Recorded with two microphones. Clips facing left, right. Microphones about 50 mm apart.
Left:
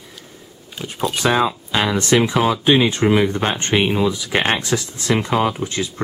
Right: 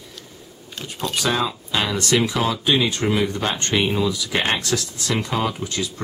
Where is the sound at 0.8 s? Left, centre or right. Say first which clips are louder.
Left 5 dB; centre.